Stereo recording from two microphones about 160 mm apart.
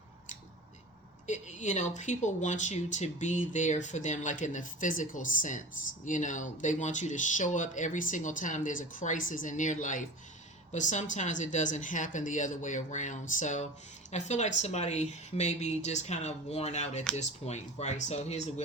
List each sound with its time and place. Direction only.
1.3 s speech: 50° left (ahead or behind)